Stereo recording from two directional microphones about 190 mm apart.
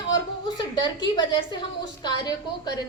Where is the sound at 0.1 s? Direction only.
20° left (ahead or behind).